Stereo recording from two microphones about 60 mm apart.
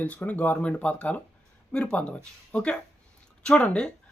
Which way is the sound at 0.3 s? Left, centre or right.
Left.